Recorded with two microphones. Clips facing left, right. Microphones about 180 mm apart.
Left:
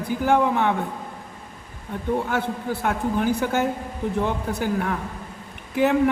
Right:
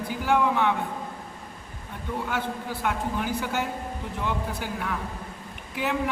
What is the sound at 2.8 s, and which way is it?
A man's voice, 45° left (ahead or behind).